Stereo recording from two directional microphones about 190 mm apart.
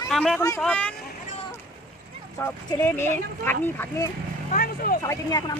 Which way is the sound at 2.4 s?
10° left (ahead or behind).